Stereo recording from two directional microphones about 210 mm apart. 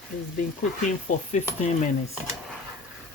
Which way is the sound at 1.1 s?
35° left (ahead or behind).